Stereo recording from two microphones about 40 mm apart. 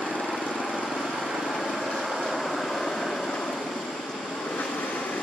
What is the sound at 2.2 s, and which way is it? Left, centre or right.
Vehicle, centre.